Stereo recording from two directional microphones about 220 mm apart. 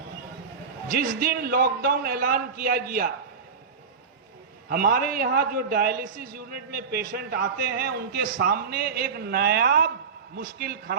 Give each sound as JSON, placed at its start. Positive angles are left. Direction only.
{"t": 0.9, "sound": "a man's voice", "side_deg": -45}
{"t": 4.7, "sound": "a man's voice", "side_deg": -40}